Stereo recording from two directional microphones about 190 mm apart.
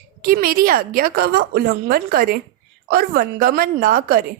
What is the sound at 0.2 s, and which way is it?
A woman's voice, 50° right (ahead or behind).